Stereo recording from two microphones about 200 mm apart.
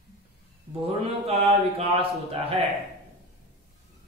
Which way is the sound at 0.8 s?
30° right (ahead or behind).